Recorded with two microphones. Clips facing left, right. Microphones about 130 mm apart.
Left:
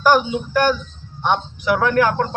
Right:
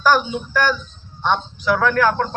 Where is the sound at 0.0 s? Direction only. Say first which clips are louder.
Left 2 dB; 15° left (ahead or behind).